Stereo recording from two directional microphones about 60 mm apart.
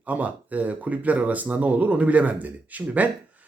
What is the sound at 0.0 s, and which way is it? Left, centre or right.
Speech, right.